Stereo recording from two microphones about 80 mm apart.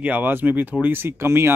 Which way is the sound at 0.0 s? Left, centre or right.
Right.